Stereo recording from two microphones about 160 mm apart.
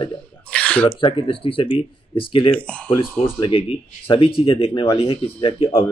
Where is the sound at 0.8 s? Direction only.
30° left (ahead or behind).